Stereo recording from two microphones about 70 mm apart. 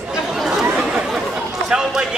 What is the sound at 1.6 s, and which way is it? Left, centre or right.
Speech, centre.